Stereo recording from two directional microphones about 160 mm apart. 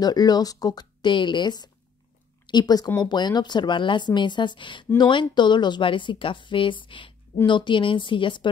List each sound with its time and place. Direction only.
0.0 s speech: 25° left (ahead or behind)